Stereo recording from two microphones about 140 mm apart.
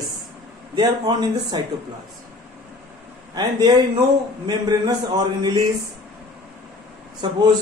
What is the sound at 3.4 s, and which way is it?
A man's voice, 30° right (ahead or behind).